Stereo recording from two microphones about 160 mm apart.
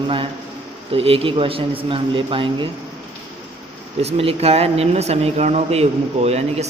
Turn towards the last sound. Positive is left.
turn(degrees=-40)  # may be behind; listen again after turning